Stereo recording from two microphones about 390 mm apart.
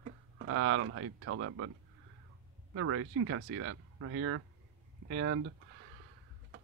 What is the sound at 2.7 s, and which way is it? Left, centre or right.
Speech, right.